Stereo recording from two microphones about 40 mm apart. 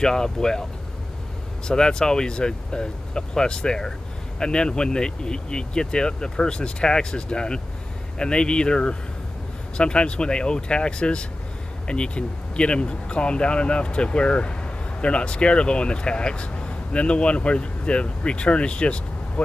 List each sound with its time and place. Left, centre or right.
0.0 s speech: centre
1.7 s speech: centre